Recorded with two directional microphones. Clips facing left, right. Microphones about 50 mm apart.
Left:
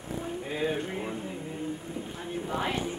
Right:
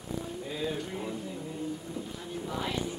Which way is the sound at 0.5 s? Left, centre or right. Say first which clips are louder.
Left 4 dB; left.